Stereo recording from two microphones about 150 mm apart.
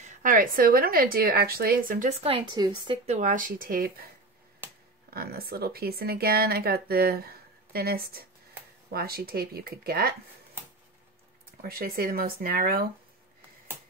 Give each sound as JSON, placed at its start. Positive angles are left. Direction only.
{"t": 0.0, "sound": "a woman's voice", "side_deg": -60}
{"t": 3.1, "sound": "speech", "side_deg": -55}
{"t": 5.1, "sound": "speech", "side_deg": -90}
{"t": 11.6, "sound": "speech", "side_deg": -80}